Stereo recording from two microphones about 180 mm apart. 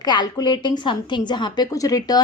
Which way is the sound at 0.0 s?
25° left (ahead or behind).